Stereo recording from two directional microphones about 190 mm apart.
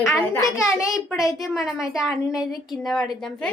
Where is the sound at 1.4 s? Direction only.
Centre (ahead or behind).